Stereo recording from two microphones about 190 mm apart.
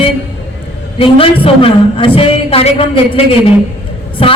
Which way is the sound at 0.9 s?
30° left (ahead or behind).